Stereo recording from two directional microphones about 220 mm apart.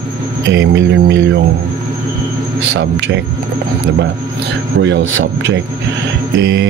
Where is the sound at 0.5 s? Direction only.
55° right (ahead or behind).